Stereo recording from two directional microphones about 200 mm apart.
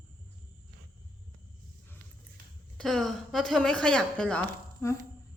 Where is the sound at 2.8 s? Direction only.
Centre (ahead or behind).